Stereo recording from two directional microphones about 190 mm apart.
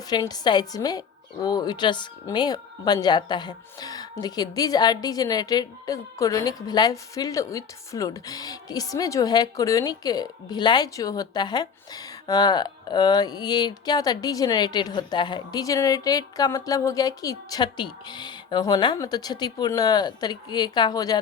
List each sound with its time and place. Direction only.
0.1 s a woman's voice: 20° left (ahead or behind)